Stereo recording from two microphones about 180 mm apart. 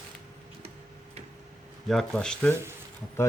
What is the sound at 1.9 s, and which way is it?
Speech, 5° left (ahead or behind).